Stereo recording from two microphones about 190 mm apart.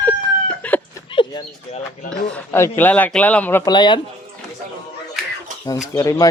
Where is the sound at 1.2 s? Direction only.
25° left (ahead or behind).